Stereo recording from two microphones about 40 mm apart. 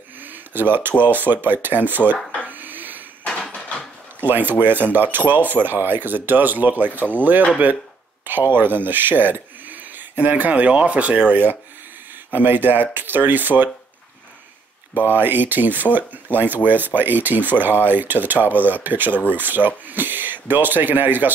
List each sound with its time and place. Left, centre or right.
0.2 s a sound: right
1.0 s speech: right
2.4 s dog: right
3.6 s a sound: left
4.3 s speech: right
8.3 s speech: right
15.0 s speech: right